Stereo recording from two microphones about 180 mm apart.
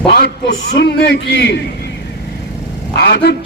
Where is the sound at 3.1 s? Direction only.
65° left (ahead or behind).